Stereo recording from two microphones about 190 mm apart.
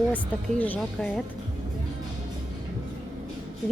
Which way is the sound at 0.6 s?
5° left (ahead or behind).